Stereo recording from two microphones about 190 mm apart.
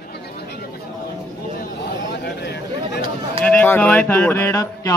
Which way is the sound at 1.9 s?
60° left (ahead or behind).